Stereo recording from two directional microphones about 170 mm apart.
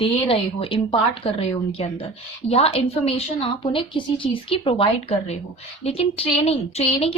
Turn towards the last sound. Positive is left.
turn(degrees=35)  # may be behind; listen again after turning